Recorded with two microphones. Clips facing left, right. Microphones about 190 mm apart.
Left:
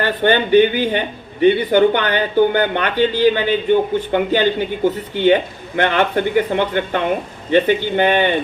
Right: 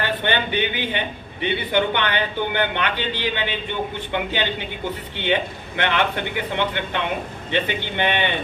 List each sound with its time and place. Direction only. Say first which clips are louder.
0.0 s a man's voice: left 7 dB; 45° left (ahead or behind)